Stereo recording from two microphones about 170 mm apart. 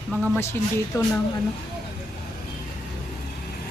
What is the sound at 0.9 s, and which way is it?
Speech, 20° left (ahead or behind).